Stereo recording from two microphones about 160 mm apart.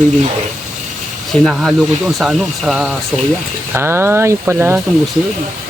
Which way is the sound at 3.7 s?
15° right (ahead or behind).